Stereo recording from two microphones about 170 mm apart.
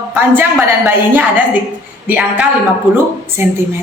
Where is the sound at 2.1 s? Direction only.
10° right (ahead or behind).